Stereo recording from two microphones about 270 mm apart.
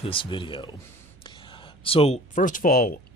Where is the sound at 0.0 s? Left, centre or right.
Centre.